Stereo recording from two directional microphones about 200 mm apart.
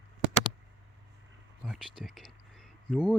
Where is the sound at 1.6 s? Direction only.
Centre (ahead or behind).